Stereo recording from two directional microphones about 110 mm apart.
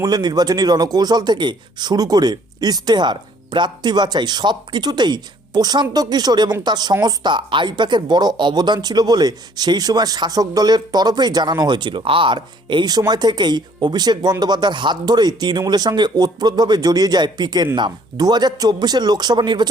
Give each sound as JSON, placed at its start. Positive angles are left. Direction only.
{"t": 0.0, "sound": "speech", "side_deg": -35}